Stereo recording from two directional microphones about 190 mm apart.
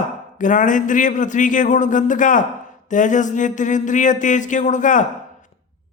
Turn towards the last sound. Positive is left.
turn(degrees=40)  # may be behind; listen again after turning